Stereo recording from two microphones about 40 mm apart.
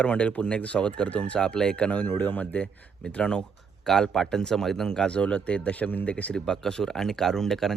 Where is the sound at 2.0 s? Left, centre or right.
Left.